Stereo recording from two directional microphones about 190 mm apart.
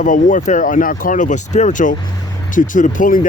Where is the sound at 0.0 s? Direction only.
45° left (ahead or behind).